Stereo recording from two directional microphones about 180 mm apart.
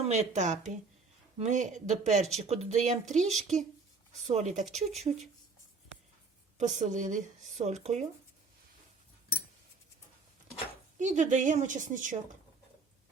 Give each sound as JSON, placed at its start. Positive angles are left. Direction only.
{"t": 0.0, "sound": "speech", "side_deg": -40}
{"t": 4.3, "sound": "speech", "side_deg": -40}
{"t": 6.6, "sound": "speech", "side_deg": -40}
{"t": 10.9, "sound": "a woman's voice", "side_deg": -45}